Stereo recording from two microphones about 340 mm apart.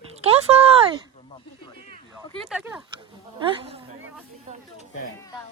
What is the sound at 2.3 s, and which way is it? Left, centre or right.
Speech, centre.